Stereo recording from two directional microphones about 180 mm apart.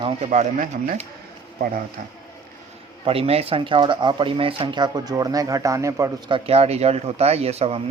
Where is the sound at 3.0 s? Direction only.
30° right (ahead or behind).